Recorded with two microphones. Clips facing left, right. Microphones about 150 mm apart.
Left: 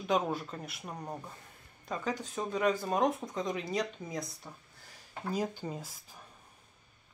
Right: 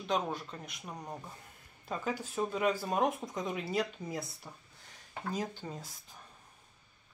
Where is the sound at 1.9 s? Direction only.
5° right (ahead or behind).